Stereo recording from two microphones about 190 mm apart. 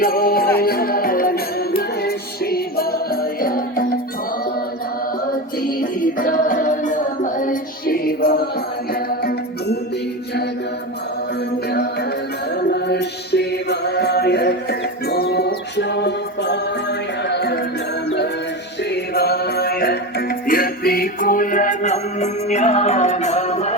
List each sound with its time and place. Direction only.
0.0 s music: 50° left (ahead or behind)
5.2 s music: 50° left (ahead or behind)
11.7 s music: 55° left (ahead or behind)
18.8 s music: 60° left (ahead or behind); by 23.7 s 35° left (ahead or behind)